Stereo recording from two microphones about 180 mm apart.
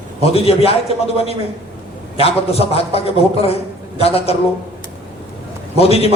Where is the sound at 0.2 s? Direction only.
35° left (ahead or behind).